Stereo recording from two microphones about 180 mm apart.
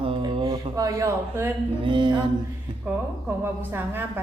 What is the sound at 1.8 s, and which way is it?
Speech, 25° right (ahead or behind).